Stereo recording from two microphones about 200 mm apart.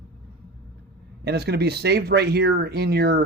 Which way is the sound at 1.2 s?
55° right (ahead or behind).